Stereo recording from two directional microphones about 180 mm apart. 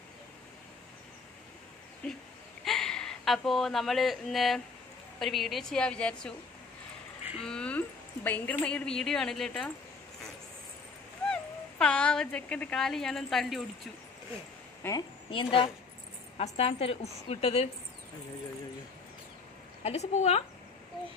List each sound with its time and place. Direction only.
2.0 s a woman's voice: 5° left (ahead or behind)
7.4 s a woman's voice: 5° left (ahead or behind)
11.2 s speech: 5° left (ahead or behind)
14.8 s a woman's voice: 20° left (ahead or behind)
15.3 s a woman's voice: 30° left (ahead or behind)
19.8 s a woman's voice: 35° left (ahead or behind)